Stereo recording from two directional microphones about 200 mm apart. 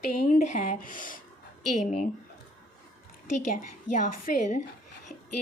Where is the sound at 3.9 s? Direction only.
40° left (ahead or behind).